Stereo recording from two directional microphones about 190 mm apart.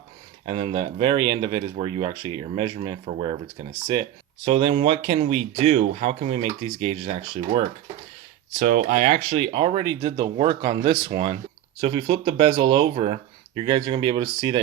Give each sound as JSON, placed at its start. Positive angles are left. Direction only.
{"t": 0.4, "sound": "speech", "side_deg": -25}
{"t": 4.4, "sound": "speech", "side_deg": -25}
{"t": 8.5, "sound": "speech", "side_deg": -45}